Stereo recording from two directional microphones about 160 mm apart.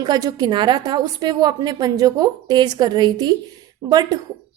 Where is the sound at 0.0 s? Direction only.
25° right (ahead or behind).